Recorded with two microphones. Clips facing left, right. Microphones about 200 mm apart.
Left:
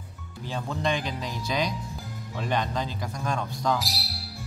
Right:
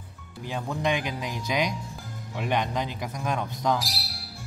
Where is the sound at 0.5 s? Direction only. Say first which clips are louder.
Right 1 dB; 15° right (ahead or behind).